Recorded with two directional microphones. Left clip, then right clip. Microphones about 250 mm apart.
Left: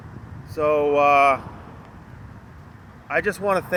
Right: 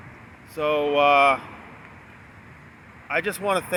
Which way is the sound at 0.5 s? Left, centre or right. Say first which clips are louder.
Left 3 dB; centre.